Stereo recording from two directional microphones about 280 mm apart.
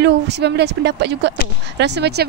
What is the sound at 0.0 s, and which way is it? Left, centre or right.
A woman's voice, right.